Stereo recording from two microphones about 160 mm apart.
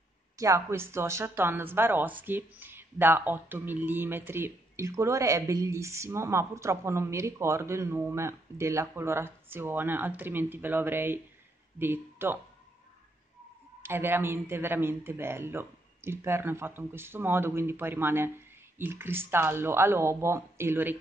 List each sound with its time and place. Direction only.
0.4 s speech: 20° right (ahead or behind)
13.8 s speech: 15° right (ahead or behind)